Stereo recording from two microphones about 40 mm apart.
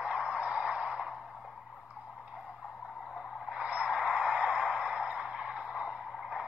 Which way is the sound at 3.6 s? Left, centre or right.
Right.